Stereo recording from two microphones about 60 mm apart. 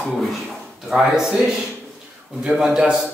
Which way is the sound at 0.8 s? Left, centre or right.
Centre.